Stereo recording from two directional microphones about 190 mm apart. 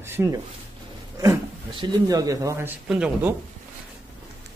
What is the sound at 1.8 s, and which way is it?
Speech, 20° right (ahead or behind).